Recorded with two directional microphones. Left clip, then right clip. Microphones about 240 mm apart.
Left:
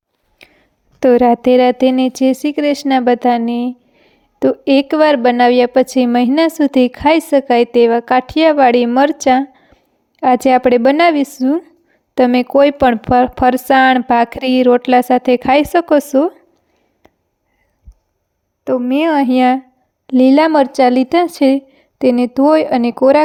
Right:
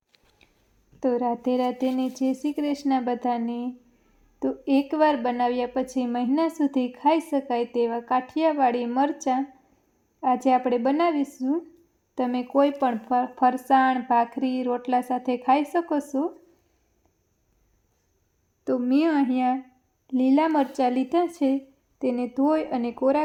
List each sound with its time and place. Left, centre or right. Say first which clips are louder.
0.9 s a woman's voice: left 15 dB; left
18.6 s a woman's voice: left 9 dB; left